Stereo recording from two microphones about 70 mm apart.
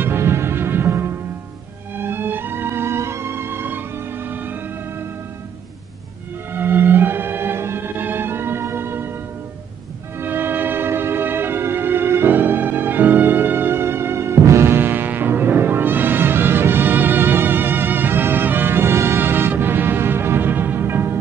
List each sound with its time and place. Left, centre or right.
0.0 s music: right
6.5 s music: right
10.2 s music: right